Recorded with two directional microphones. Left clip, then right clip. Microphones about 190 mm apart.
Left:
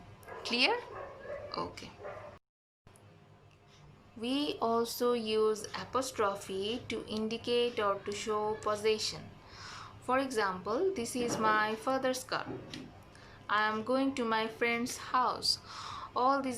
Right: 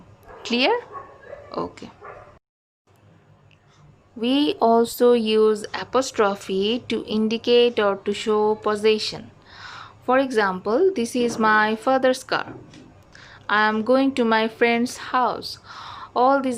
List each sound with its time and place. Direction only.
0.4 s speech: 45° right (ahead or behind)
4.2 s a woman's voice: 50° right (ahead or behind)